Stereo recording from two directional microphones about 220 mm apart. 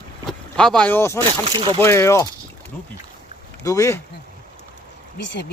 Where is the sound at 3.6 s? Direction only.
15° left (ahead or behind).